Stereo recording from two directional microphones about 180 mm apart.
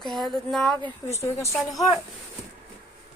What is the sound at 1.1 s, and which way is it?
Speech, 15° left (ahead or behind).